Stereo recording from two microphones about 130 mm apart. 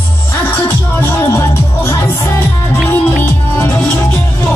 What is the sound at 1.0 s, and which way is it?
Music, 20° left (ahead or behind).